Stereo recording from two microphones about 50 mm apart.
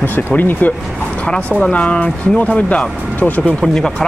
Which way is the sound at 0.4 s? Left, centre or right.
Left.